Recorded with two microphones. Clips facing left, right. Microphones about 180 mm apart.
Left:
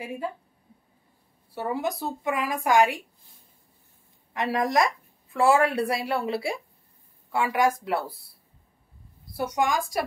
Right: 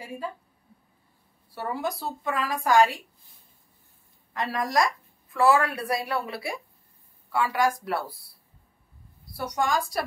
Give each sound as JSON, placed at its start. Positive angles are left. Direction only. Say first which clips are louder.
{"t": 1.5, "sound": "a woman's voice", "louder": "left 2 dB", "side_deg": 20}
{"t": 4.3, "sound": "a woman's voice", "louder": "left 3 dB", "side_deg": 20}
{"t": 9.6, "sound": "a woman's voice", "louder": "even", "side_deg": 15}